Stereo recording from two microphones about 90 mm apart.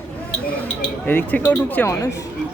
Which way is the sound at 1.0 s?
20° left (ahead or behind).